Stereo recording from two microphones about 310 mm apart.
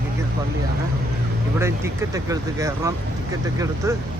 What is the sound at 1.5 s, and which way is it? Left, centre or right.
Speech, centre.